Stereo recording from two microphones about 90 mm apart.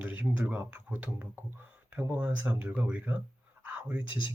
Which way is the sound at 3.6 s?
20° right (ahead or behind).